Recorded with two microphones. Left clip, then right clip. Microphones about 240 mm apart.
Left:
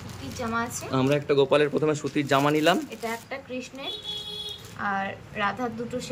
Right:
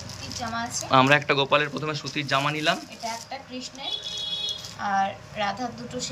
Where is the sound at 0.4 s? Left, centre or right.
Centre.